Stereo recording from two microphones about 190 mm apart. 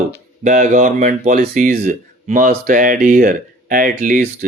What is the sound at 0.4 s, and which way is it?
Speech, 40° right (ahead or behind).